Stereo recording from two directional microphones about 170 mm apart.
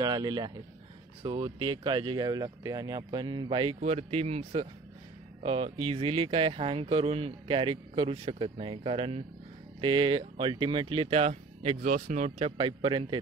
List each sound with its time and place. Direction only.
0.0 s speech: 25° right (ahead or behind)